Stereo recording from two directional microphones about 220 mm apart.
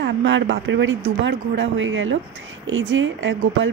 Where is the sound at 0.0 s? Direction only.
55° right (ahead or behind).